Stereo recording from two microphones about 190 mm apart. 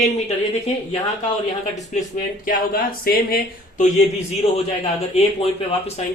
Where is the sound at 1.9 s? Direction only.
40° left (ahead or behind).